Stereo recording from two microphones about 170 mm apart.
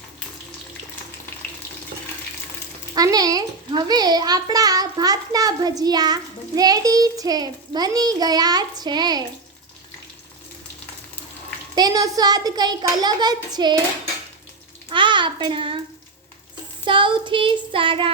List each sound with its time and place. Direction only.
2.9 s a child's voice: 20° right (ahead or behind)
11.7 s a child's voice: 25° right (ahead or behind)
14.8 s a child's voice: 30° right (ahead or behind)
16.8 s child singing: 30° right (ahead or behind)